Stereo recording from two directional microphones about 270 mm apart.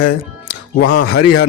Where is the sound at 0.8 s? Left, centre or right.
Left.